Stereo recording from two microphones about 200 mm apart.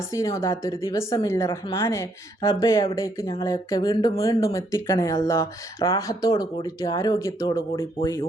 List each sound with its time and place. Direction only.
0.1 s speech: 15° left (ahead or behind)